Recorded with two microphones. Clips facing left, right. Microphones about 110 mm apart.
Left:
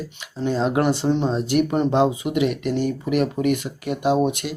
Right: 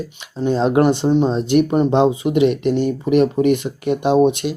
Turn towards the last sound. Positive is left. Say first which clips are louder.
# right 5 dB
turn(degrees=-20)  # may be behind; listen again after turning